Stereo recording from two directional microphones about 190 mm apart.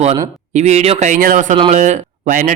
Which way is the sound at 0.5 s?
35° right (ahead or behind).